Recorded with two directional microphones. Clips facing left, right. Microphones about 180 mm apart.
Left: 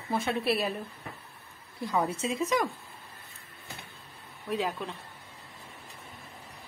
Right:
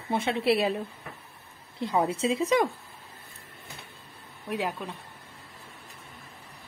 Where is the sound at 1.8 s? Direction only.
25° right (ahead or behind).